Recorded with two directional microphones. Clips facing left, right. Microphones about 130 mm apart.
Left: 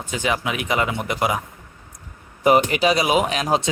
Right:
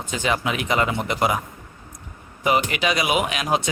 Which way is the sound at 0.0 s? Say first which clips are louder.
Even; 15° left (ahead or behind).